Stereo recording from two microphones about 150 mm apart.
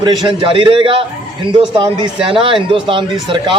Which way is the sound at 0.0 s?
30° right (ahead or behind).